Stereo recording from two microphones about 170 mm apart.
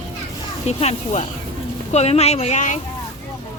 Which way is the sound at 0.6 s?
40° left (ahead or behind).